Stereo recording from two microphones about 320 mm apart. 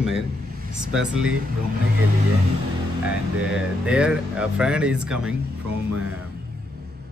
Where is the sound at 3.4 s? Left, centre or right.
Centre.